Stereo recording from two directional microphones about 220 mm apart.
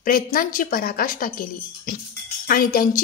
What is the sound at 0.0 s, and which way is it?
A woman's voice, 40° left (ahead or behind).